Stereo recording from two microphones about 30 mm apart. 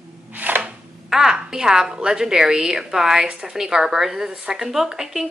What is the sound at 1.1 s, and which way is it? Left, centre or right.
A woman's voice, right.